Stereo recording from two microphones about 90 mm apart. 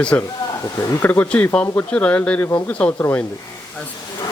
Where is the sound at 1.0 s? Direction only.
25° left (ahead or behind).